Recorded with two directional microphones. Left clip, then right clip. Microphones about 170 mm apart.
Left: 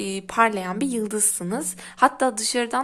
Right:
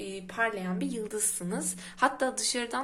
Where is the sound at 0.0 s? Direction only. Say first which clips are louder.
Left 10 dB; 50° left (ahead or behind).